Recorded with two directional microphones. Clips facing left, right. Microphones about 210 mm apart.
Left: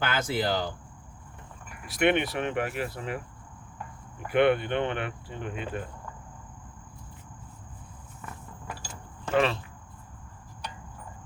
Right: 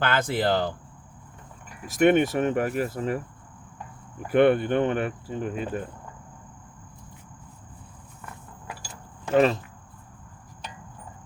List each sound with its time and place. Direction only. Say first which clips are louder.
0.0 s speech: right 4 dB; 55° right (ahead or behind)
1.9 s speech: right 5 dB; 45° right (ahead or behind)
4.3 s speech: right 4 dB; 45° right (ahead or behind)
9.3 s speech: right 5 dB; 40° right (ahead or behind)